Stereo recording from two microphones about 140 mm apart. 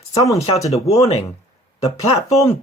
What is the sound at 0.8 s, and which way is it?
Speech, 50° left (ahead or behind).